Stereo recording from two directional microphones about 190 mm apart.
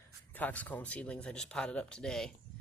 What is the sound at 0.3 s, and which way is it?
Speech, 10° left (ahead or behind).